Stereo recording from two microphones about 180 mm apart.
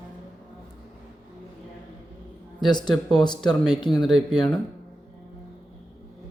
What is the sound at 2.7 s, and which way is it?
Speech, 25° left (ahead or behind).